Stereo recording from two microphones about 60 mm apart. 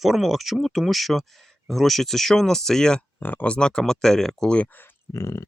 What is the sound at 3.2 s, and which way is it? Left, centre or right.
Speech, left.